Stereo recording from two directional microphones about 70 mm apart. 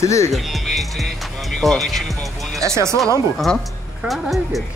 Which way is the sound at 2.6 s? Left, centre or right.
Right.